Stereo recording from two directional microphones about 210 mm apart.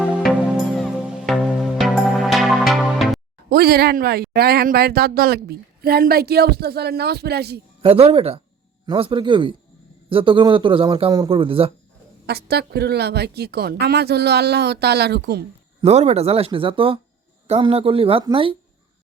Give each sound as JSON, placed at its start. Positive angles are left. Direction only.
{"t": 0.0, "sound": "music", "side_deg": 0}
{"t": 3.5, "sound": "speech", "side_deg": -45}
{"t": 7.8, "sound": "a man's voice", "side_deg": -25}
{"t": 12.2, "sound": "speech", "side_deg": -50}
{"t": 15.8, "sound": "a man's voice", "side_deg": -30}